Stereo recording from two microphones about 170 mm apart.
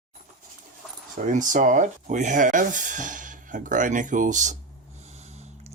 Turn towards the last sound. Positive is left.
turn(degrees=-40)  # may be behind; listen again after turning